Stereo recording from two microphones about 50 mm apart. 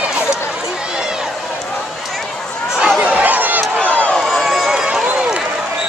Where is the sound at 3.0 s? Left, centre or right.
Right.